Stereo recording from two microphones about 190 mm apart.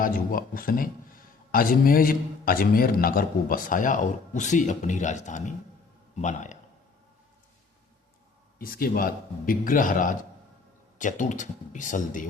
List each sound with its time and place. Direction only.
0.0 s a man's voice: 45° left (ahead or behind)
8.5 s a man's voice: 50° left (ahead or behind)